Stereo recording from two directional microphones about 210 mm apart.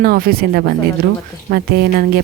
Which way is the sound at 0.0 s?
45° right (ahead or behind).